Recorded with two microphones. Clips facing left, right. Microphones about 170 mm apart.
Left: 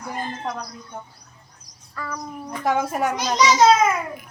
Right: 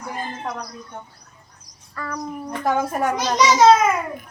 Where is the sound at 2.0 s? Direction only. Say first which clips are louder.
Right 3 dB; 5° left (ahead or behind).